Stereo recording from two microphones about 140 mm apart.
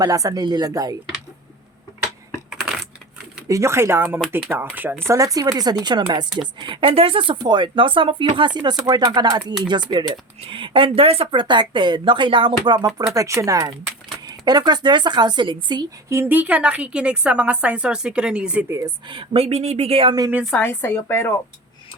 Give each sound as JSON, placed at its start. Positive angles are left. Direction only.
{"t": 0.0, "sound": "speech", "side_deg": -25}
{"t": 3.5, "sound": "a woman's voice", "side_deg": -20}
{"t": 13.1, "sound": "speech", "side_deg": -20}
{"t": 16.0, "sound": "a woman's voice", "side_deg": -15}
{"t": 18.7, "sound": "speech", "side_deg": -25}
{"t": 19.0, "sound": "speech", "side_deg": -40}
{"t": 20.6, "sound": "a woman's voice", "side_deg": 15}